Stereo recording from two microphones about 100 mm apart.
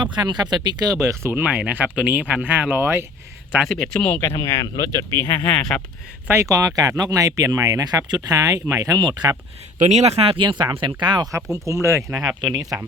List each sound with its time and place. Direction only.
0.0 s speech: 50° right (ahead or behind); by 1.3 s 35° right (ahead or behind)
1.3 s speech: 15° right (ahead or behind)
3.7 s speech: 5° left (ahead or behind)
4.4 s speech: 35° left (ahead or behind)
5.5 s speech: 10° left (ahead or behind)
6.2 s speech: 30° right (ahead or behind); by 9.3 s 45° right (ahead or behind)
10.0 s speech: 90° right
10.4 s speech: 50° right (ahead or behind)
11.5 s speech: 30° right (ahead or behind)
12.2 s speech: 10° right (ahead or behind)